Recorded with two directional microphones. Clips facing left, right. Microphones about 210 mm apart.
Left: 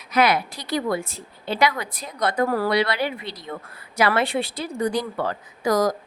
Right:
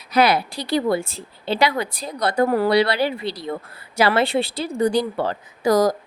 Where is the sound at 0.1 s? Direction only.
35° right (ahead or behind).